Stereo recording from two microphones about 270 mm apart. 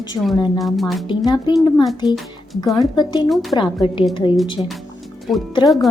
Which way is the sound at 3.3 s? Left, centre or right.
Centre.